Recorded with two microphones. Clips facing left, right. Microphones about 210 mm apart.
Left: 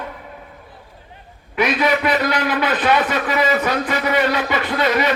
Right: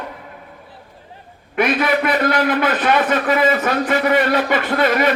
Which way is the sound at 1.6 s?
50° right (ahead or behind).